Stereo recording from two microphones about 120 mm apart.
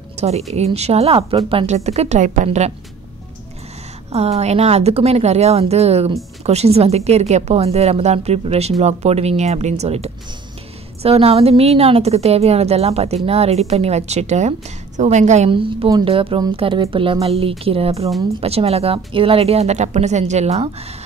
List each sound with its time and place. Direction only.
0.2 s a woman's voice: 65° right (ahead or behind)
1.7 s a woman's voice: 65° right (ahead or behind)
4.1 s a woman's voice: 60° right (ahead or behind)
15.0 s a woman's voice: 85° right
15.5 s a woman's voice: 45° right (ahead or behind); by 20.7 s 65° right (ahead or behind)